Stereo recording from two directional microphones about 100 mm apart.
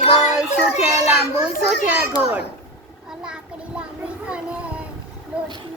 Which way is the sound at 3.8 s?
10° right (ahead or behind).